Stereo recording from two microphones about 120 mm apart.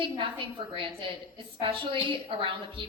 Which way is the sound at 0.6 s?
45° right (ahead or behind).